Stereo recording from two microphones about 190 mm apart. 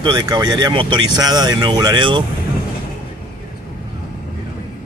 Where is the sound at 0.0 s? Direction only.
20° right (ahead or behind).